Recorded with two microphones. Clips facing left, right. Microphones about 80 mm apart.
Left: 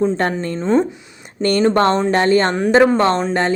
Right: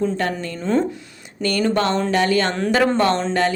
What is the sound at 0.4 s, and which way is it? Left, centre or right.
Speech, left.